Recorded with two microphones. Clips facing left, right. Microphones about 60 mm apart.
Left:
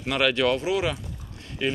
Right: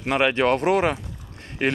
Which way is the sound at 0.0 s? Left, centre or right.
Right.